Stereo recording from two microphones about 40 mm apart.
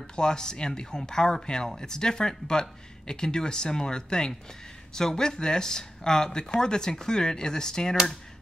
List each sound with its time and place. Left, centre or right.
0.0 s speech: centre